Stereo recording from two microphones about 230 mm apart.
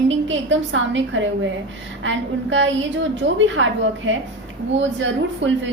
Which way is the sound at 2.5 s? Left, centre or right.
Right.